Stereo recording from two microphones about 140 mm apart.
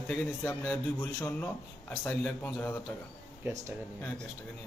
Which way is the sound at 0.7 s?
10° left (ahead or behind).